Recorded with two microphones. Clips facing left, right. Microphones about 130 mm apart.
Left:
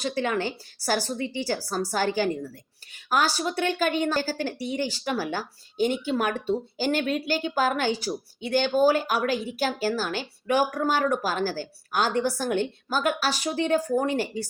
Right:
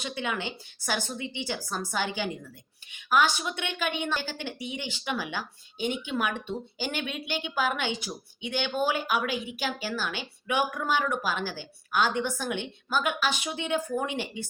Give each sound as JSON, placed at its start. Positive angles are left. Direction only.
{"t": 0.2, "sound": "speech", "side_deg": 40}